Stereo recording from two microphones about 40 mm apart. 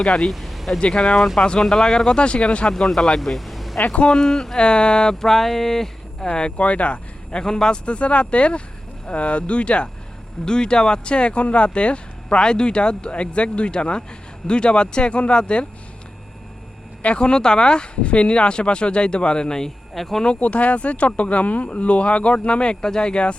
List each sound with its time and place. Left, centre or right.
0.0 s speech: centre
0.3 s vehicle: centre
0.8 s speech: left
1.0 s speech: centre
1.4 s speech: left
2.6 s speech: centre
3.3 s vehicle: centre
3.8 s speech: left
4.1 s speech: centre
6.6 s speech: left
7.9 s speech: left
17.0 s speech: left
19.9 s speech: centre
20.2 s speech: left